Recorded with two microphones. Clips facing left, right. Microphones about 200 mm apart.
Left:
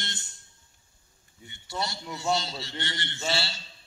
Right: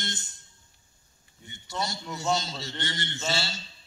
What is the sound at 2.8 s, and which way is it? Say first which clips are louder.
Speech: right 1 dB; 45° right (ahead or behind).